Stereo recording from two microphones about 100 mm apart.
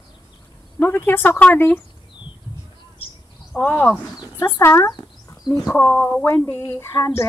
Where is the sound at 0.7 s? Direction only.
20° left (ahead or behind).